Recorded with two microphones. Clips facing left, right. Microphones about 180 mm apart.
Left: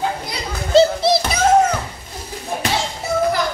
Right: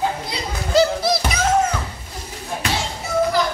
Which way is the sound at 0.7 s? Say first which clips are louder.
Left 4 dB; 25° left (ahead or behind).